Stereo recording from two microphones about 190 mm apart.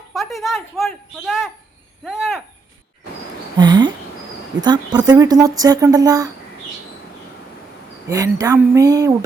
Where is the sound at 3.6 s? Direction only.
25° right (ahead or behind).